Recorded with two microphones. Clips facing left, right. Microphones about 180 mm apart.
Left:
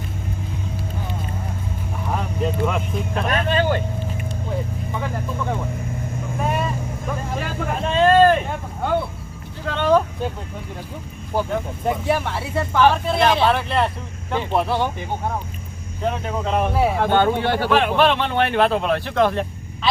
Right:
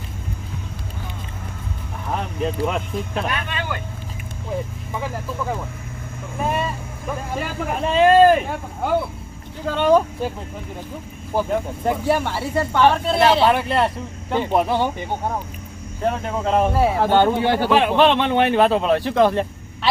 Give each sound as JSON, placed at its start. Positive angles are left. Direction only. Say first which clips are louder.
{"t": 3.2, "sound": "speech", "louder": "left 7 dB", "side_deg": 40}
{"t": 4.9, "sound": "speech", "louder": "right 1 dB", "side_deg": -5}
{"t": 6.4, "sound": "vehicle", "louder": "right 1 dB", "side_deg": 0}
{"t": 7.1, "sound": "speech", "louder": "right 1 dB", "side_deg": -5}
{"t": 11.3, "sound": "speech", "louder": "right 1 dB", "side_deg": -5}
{"t": 16.1, "sound": "speech", "louder": "right 3 dB", "side_deg": 0}